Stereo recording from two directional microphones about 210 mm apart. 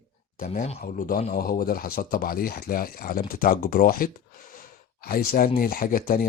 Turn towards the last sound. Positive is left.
turn(degrees=40)  # may be behind; listen again after turning